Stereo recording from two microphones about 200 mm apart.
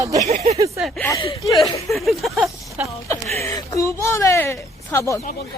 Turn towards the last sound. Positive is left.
turn(degrees=15)  # may be behind; listen again after turning